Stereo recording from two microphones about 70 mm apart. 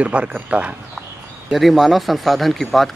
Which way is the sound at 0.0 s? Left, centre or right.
Centre.